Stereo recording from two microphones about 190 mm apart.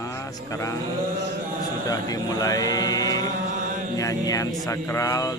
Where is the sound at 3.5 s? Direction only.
45° right (ahead or behind).